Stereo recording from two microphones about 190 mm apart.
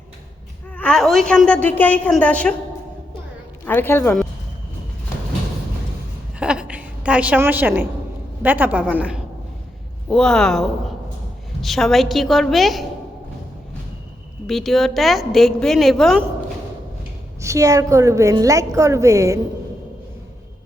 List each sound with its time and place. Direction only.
0.8 s a woman's voice: 5° left (ahead or behind)
3.7 s a woman's voice: 10° left (ahead or behind)
6.4 s a woman's voice: 5° right (ahead or behind)
14.4 s a woman's voice: centre (ahead or behind)
17.4 s a woman's voice: 15° right (ahead or behind)